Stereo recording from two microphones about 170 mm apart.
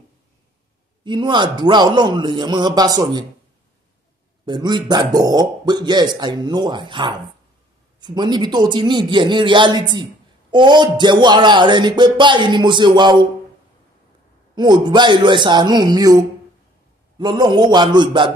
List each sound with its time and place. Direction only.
1.0 s speech: 25° right (ahead or behind)
4.5 s speech: 25° right (ahead or behind)
14.5 s speech: 25° right (ahead or behind)